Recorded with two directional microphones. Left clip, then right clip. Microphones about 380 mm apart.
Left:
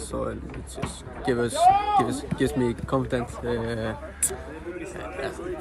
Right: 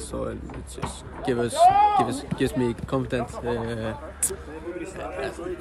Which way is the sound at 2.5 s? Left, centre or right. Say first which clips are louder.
Left 1 dB; centre.